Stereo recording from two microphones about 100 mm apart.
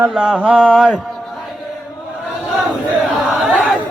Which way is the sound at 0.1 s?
Centre (ahead or behind).